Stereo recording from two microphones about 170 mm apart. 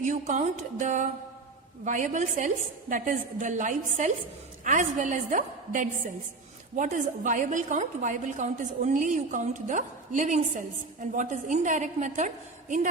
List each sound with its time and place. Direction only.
0.0 s a woman's voice: 45° right (ahead or behind)